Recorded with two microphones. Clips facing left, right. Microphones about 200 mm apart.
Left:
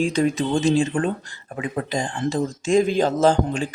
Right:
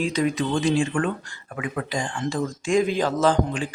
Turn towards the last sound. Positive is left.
turn(degrees=25)  # may be behind; listen again after turning